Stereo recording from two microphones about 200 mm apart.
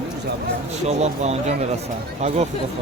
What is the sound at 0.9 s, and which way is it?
Speech, 35° right (ahead or behind).